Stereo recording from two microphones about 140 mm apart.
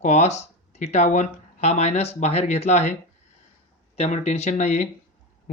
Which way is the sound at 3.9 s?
50° left (ahead or behind).